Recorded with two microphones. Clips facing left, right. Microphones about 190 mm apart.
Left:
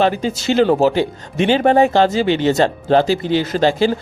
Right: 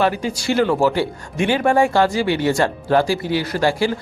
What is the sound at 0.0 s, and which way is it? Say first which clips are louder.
Speech: left 3 dB; 25° left (ahead or behind).